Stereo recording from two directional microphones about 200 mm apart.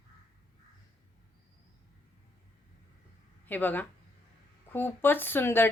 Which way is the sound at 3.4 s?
10° left (ahead or behind).